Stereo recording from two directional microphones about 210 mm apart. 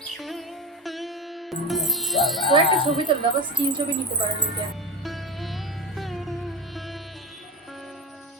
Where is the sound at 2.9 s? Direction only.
25° right (ahead or behind).